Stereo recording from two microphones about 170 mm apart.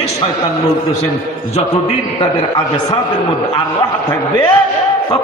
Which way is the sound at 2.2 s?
30° left (ahead or behind).